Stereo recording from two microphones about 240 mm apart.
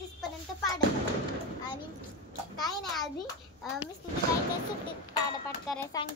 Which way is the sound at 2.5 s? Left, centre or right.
Centre.